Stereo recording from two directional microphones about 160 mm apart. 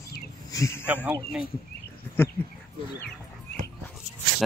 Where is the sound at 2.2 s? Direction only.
10° left (ahead or behind).